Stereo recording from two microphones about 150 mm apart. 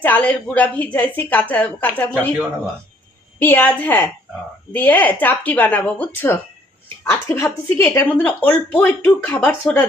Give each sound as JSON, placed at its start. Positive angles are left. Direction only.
{"t": 0.0, "sound": "a woman's voice", "side_deg": 10}
{"t": 3.4, "sound": "a woman's voice", "side_deg": 10}